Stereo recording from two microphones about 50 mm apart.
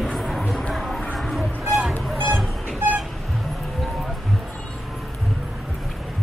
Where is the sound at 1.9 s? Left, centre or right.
Right.